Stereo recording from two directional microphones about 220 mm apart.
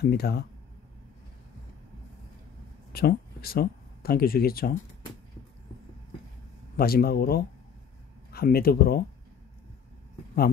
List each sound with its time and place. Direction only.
0.0 s speech: 45° left (ahead or behind)
2.9 s speech: 45° left (ahead or behind)
6.8 s speech: 45° left (ahead or behind)